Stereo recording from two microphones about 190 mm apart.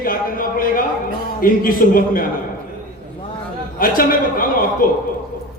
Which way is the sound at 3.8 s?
50° left (ahead or behind).